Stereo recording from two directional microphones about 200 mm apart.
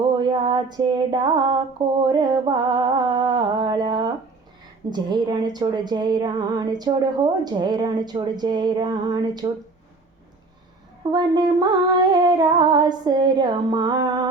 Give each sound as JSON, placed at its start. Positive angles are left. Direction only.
{"t": 0.2, "sound": "a sound", "side_deg": -25}
{"t": 2.0, "sound": "music", "side_deg": -20}
{"t": 4.9, "sound": "speech", "side_deg": -20}
{"t": 11.1, "sound": "speech", "side_deg": -20}